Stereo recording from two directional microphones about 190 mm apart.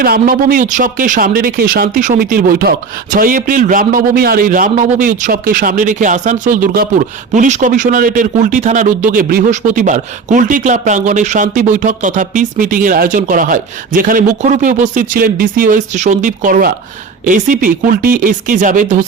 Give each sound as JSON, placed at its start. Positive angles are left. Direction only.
{"t": 0.0, "sound": "a man's voice", "side_deg": -50}